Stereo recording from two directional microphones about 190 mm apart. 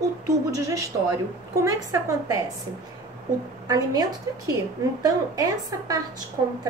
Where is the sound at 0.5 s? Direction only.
15° right (ahead or behind).